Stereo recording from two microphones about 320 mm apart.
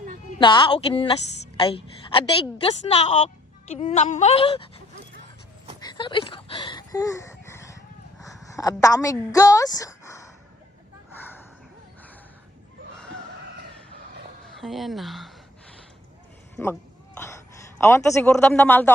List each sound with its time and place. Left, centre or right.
0.3 s a woman's voice: centre
5.8 s a sound: centre
8.2 s a woman's voice: centre
11.2 s a sound: centre
14.5 s a woman's voice: centre
17.2 s a man's voice: centre